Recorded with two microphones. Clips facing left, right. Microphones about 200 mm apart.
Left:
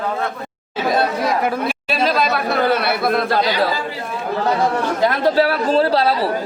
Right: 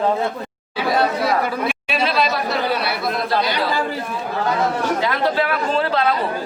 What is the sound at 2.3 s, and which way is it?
A man's voice, 55° left (ahead or behind).